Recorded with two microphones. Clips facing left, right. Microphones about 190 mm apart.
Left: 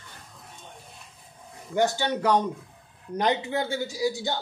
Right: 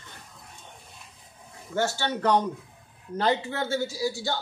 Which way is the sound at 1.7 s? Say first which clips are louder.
Left 3 dB; 15° left (ahead or behind).